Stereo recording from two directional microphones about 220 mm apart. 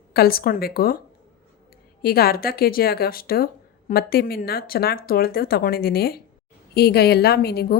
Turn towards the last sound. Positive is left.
turn(degrees=45)  # may be behind; listen again after turning